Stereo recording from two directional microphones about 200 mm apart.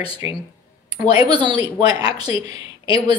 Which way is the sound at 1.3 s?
20° right (ahead or behind).